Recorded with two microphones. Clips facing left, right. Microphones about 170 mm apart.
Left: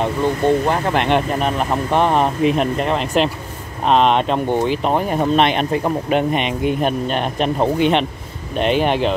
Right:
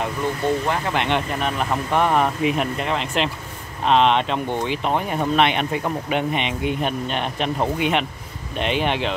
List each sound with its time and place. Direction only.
0.7 s speech: 40° left (ahead or behind)
8.5 s speech: 45° left (ahead or behind)